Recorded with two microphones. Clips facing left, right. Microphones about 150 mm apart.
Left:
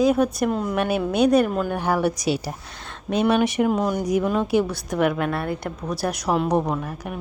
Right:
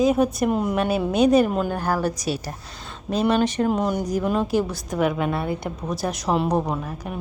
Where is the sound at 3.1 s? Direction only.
Centre (ahead or behind).